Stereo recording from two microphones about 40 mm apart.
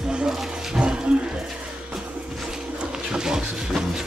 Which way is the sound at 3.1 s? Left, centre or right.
Centre.